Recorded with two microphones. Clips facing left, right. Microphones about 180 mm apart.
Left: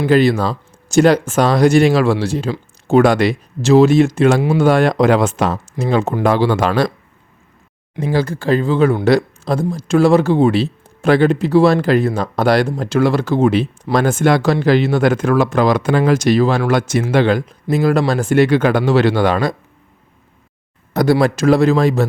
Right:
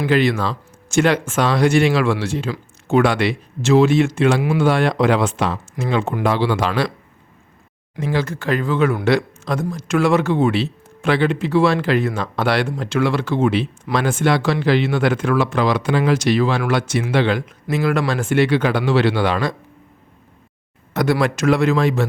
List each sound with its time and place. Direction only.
0.1 s speech: 35° left (ahead or behind)
7.9 s speech: 35° left (ahead or behind)
20.9 s speech: 35° left (ahead or behind)